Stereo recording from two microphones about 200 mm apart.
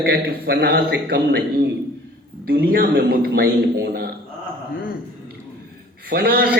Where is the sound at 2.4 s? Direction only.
50° right (ahead or behind).